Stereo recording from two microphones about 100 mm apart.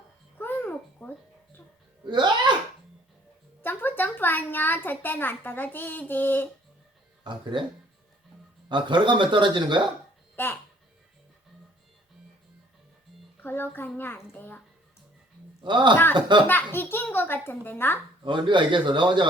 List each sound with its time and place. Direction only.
0.3 s babbling: 20° left (ahead or behind)
2.0 s a man's voice: 50° right (ahead or behind)
3.6 s speech: 20° left (ahead or behind)
7.3 s a man's voice: 50° right (ahead or behind)
8.7 s a man's voice: 50° right (ahead or behind)
10.3 s a child's voice: 20° left (ahead or behind)
13.4 s a child's voice: 20° left (ahead or behind)
15.6 s a man's voice: 50° right (ahead or behind)
16.5 s a child's voice: 20° left (ahead or behind)
18.2 s a man's voice: 50° right (ahead or behind)